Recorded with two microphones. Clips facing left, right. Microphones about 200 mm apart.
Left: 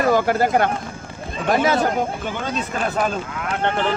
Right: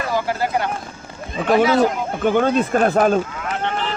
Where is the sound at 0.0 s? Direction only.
50° left (ahead or behind).